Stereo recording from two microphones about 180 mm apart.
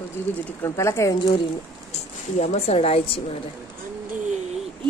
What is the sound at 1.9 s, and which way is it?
Speech, 40° left (ahead or behind).